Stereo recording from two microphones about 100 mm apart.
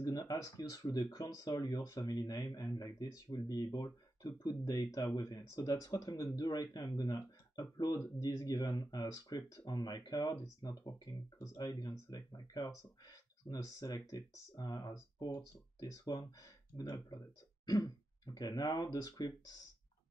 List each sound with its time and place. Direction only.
0.0 s speech: 40° left (ahead or behind)